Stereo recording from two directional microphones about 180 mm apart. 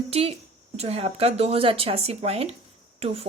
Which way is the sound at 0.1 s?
35° right (ahead or behind).